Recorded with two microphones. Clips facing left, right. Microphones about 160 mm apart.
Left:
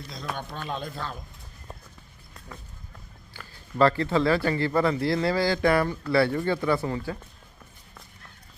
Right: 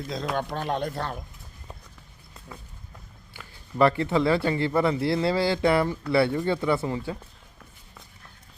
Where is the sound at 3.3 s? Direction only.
20° right (ahead or behind).